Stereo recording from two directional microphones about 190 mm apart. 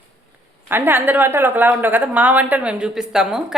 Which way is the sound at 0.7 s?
10° right (ahead or behind).